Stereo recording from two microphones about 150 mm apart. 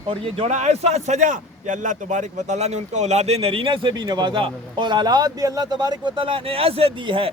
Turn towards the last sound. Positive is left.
turn(degrees=-35)  # may be behind; listen again after turning